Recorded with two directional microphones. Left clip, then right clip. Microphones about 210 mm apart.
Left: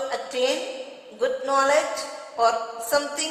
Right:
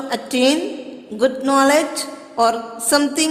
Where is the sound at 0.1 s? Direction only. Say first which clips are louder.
Right 10 dB; 55° right (ahead or behind).